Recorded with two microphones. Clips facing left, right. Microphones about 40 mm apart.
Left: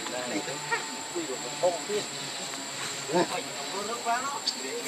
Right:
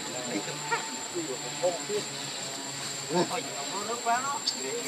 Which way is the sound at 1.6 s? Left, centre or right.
Left.